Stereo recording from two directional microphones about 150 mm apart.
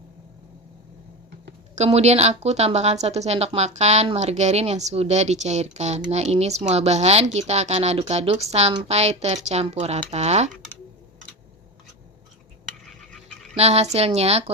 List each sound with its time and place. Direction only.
1.7 s speech: 45° right (ahead or behind)
13.1 s dog: centre (ahead or behind)
13.6 s speech: 45° right (ahead or behind)